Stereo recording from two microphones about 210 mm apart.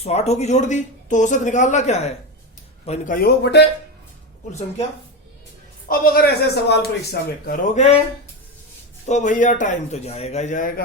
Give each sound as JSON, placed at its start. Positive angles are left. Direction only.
{"t": 0.0, "sound": "speech", "side_deg": 30}
{"t": 3.2, "sound": "a man's voice", "side_deg": 55}
{"t": 5.9, "sound": "a man's voice", "side_deg": 45}
{"t": 9.0, "sound": "speech", "side_deg": 35}